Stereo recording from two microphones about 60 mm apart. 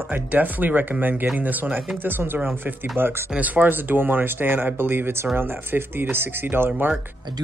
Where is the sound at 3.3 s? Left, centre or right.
Right.